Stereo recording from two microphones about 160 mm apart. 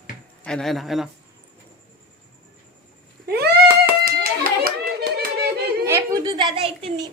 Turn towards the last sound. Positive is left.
turn(degrees=-35)  # may be behind; listen again after turning